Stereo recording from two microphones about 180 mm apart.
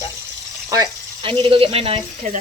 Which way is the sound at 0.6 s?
20° right (ahead or behind).